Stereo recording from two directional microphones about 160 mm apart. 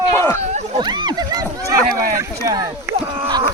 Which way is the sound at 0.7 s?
25° right (ahead or behind).